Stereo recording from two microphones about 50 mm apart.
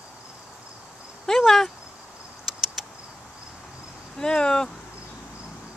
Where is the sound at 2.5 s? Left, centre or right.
Centre.